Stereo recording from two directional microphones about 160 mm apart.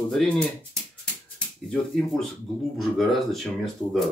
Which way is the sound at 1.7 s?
5° left (ahead or behind).